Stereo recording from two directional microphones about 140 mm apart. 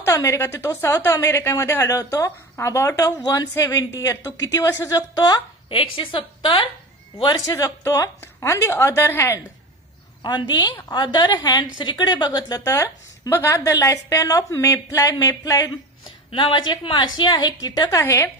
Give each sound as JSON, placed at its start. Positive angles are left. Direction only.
{"t": 0.0, "sound": "a woman's voice", "side_deg": 20}
{"t": 5.7, "sound": "a woman's voice", "side_deg": 40}
{"t": 16.3, "sound": "a woman's voice", "side_deg": 35}